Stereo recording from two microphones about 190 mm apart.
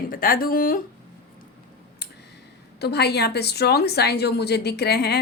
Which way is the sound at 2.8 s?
60° left (ahead or behind).